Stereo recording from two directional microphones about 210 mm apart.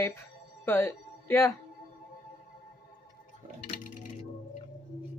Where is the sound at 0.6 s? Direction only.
10° left (ahead or behind).